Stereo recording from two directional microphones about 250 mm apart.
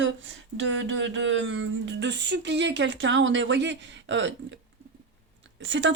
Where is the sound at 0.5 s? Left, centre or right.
Right.